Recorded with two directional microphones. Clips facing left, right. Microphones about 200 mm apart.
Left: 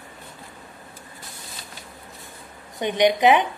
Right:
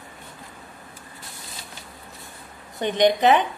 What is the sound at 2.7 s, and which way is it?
Speech, 15° left (ahead or behind).